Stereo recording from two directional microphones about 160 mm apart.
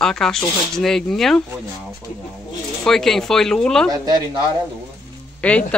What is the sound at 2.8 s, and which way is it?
Speech, centre (ahead or behind).